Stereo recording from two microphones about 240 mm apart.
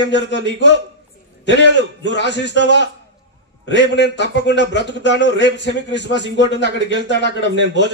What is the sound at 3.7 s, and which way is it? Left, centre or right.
A man's voice, left.